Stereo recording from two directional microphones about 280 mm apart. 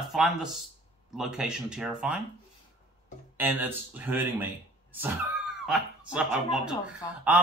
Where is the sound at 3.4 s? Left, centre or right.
Centre.